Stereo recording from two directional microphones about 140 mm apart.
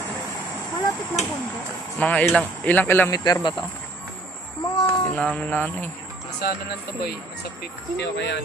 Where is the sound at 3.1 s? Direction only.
25° left (ahead or behind).